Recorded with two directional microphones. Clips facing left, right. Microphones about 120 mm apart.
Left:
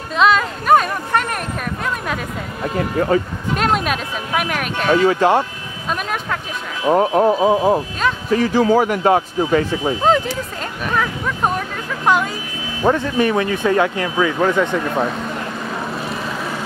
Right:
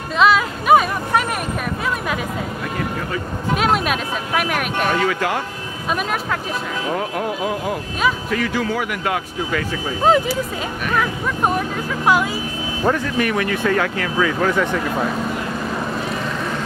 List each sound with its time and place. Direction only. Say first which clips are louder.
0.2 s a sound: even; 5° right (ahead or behind)
3.5 s speech: even; 5° right (ahead or behind)
5.0 s speech: left 6 dB; 30° left (ahead or behind)
6.9 s speech: left 11 dB; 35° left (ahead or behind)
10.0 s speech: right 3 dB; 5° right (ahead or behind)
12.8 s speech: left 3 dB; 20° left (ahead or behind)